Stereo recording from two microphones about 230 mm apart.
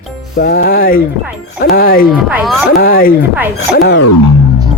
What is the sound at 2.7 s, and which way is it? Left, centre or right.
Speech, left.